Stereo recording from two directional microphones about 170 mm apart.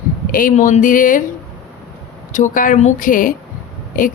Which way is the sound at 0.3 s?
55° left (ahead or behind).